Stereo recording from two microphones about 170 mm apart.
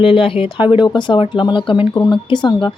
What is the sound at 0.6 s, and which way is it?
Speech, 10° right (ahead or behind).